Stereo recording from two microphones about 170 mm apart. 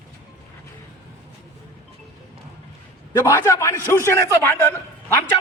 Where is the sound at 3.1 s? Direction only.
15° left (ahead or behind).